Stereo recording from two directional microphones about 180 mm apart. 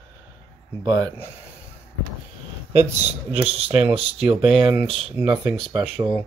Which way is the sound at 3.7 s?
5° right (ahead or behind).